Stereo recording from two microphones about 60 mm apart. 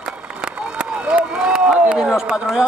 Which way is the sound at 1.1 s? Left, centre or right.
Centre.